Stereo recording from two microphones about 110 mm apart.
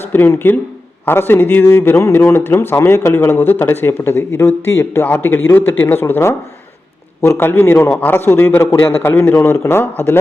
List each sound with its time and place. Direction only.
0.0 s speech: 20° left (ahead or behind)